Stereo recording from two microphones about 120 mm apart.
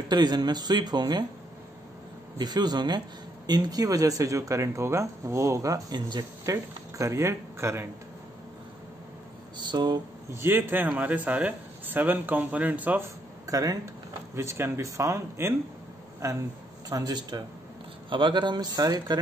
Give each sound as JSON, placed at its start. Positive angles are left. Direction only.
{"t": 0.1, "sound": "speech", "side_deg": -35}
{"t": 2.3, "sound": "speech", "side_deg": -35}
{"t": 9.6, "sound": "speech", "side_deg": -40}
{"t": 10.3, "sound": "a man's voice", "side_deg": -20}
{"t": 13.5, "sound": "speech", "side_deg": -30}